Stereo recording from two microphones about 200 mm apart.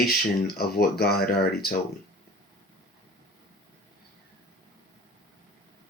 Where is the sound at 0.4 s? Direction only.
50° left (ahead or behind).